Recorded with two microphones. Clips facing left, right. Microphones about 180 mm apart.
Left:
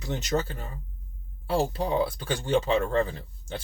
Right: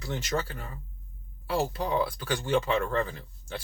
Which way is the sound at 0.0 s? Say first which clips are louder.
Left 3 dB; 20° left (ahead or behind).